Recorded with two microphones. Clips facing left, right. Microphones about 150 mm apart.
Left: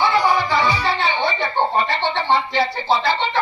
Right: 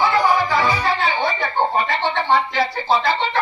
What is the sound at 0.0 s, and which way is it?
Music, 30° left (ahead or behind).